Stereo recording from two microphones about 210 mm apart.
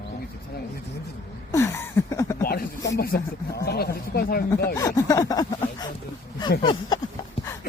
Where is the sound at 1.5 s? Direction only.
15° left (ahead or behind).